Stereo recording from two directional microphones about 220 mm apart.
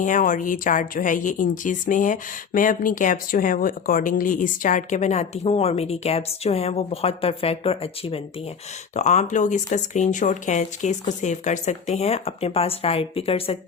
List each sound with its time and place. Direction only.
0.0 s speech: 35° left (ahead or behind)